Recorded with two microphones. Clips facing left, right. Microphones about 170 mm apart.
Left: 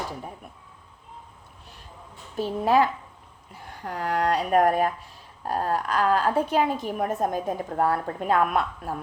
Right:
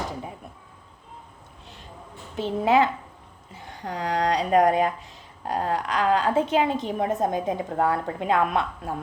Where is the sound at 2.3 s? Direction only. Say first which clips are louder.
Right 1 dB; 25° right (ahead or behind).